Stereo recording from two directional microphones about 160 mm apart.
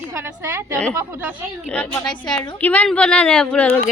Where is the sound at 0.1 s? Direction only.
15° right (ahead or behind).